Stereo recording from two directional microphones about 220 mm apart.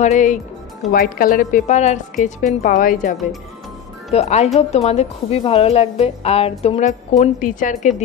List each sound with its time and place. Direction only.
0.0 s a woman's voice: 35° left (ahead or behind)